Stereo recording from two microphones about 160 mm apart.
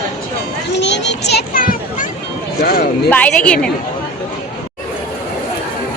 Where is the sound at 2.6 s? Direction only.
70° left (ahead or behind).